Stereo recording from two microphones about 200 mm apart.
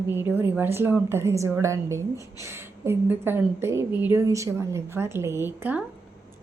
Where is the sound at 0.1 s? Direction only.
10° right (ahead or behind).